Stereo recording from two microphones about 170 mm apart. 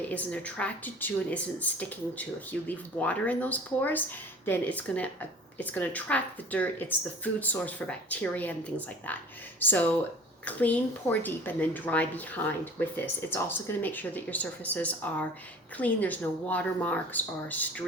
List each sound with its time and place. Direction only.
0.0 s a woman's voice: 10° left (ahead or behind)
9.6 s a woman's voice: 10° left (ahead or behind)